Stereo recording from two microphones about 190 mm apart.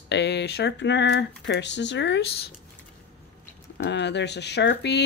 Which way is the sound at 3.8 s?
65° left (ahead or behind).